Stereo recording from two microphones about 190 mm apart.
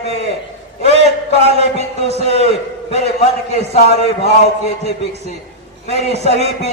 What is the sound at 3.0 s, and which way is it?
A man's voice, 35° left (ahead or behind).